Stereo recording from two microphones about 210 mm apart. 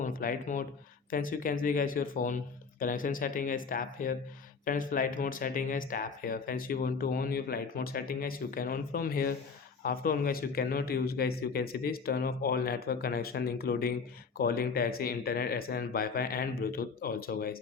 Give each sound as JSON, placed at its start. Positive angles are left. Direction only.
{"t": 0.0, "sound": "speech", "side_deg": 40}